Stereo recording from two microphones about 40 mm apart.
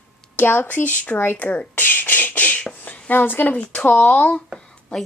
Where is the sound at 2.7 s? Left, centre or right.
Left.